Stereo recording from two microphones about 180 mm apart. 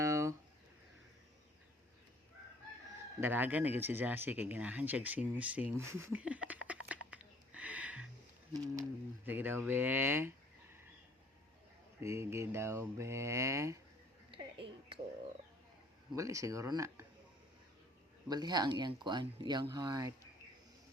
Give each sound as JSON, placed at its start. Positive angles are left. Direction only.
{"t": 0.0, "sound": "a sound", "side_deg": -15}
{"t": 3.2, "sound": "speech", "side_deg": -10}
{"t": 8.5, "sound": "speech", "side_deg": -20}
{"t": 9.2, "sound": "speech", "side_deg": -10}
{"t": 11.9, "sound": "speech", "side_deg": -15}
{"t": 14.3, "sound": "a sound", "side_deg": -30}
{"t": 16.1, "sound": "speech", "side_deg": -15}
{"t": 18.3, "sound": "speech", "side_deg": -20}